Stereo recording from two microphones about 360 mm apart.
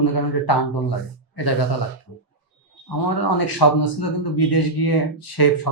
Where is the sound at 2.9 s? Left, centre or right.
Left.